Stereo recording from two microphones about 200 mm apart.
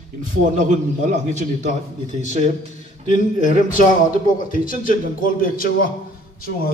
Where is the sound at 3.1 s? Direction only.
40° left (ahead or behind).